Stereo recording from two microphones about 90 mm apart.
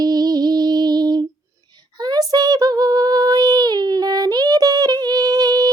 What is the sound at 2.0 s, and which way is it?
Child singing, 45° right (ahead or behind).